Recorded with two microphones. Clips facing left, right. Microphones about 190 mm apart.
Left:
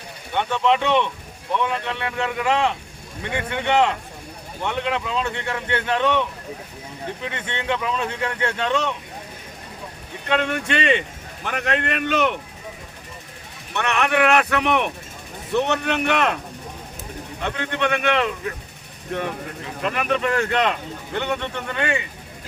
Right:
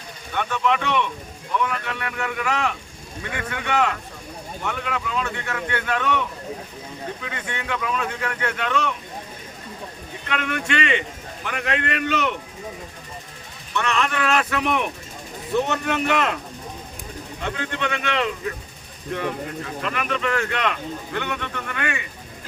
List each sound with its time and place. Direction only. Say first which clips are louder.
0.3 s speech: left 3 dB; 25° left (ahead or behind)
10.2 s speech: left 4 dB; 30° left (ahead or behind)
11.4 s a man's voice: left 2 dB; 45° left (ahead or behind)
13.7 s speech: left 3 dB; 60° left (ahead or behind)
17.4 s speech: left 3 dB; 55° left (ahead or behind)
19.8 s speech: left 4 dB; 40° left (ahead or behind); by 22.0 s 25° left (ahead or behind)